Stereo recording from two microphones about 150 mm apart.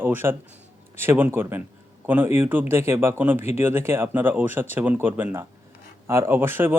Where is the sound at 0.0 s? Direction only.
15° right (ahead or behind).